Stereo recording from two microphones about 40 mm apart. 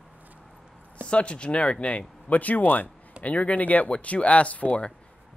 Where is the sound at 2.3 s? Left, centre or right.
Left.